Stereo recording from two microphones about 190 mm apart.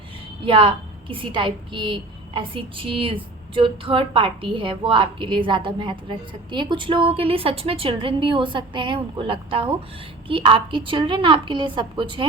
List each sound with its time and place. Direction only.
0.4 s a woman's voice: 25° right (ahead or behind)